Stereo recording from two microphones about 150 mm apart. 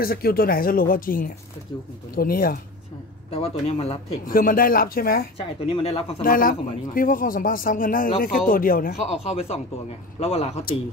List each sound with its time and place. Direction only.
0.0 s speech: 85° left
3.3 s a man's voice: 40° left (ahead or behind)
4.3 s speech: 70° left (ahead or behind)
5.7 s a man's voice: 40° left (ahead or behind)
6.2 s speech: 70° left (ahead or behind)
9.0 s a man's voice: 40° left (ahead or behind)